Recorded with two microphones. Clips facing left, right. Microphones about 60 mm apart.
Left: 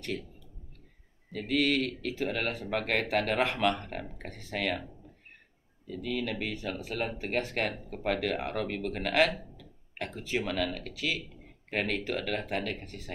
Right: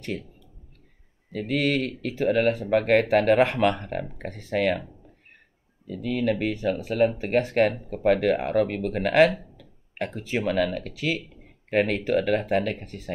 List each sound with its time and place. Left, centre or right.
1.3 s speech: right
6.0 s speech: right